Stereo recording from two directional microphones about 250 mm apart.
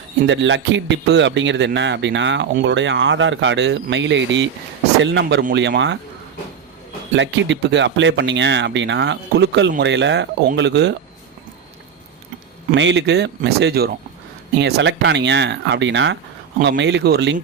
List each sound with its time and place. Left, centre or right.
0.3 s a man's voice: right
7.1 s a man's voice: right
12.7 s a man's voice: right